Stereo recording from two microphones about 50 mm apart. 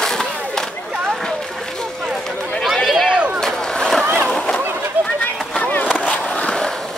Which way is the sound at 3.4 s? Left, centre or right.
Centre.